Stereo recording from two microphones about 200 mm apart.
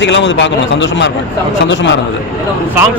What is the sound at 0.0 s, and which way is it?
A man's voice, 65° left (ahead or behind).